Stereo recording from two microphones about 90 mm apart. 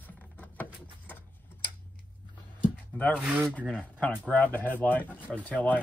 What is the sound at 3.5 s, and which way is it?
Speech, 15° left (ahead or behind).